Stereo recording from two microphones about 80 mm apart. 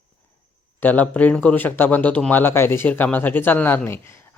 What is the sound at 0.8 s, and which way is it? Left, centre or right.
Speech, left.